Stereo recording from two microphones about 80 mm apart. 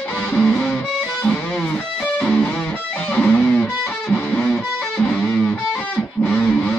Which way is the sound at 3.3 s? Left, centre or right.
Left.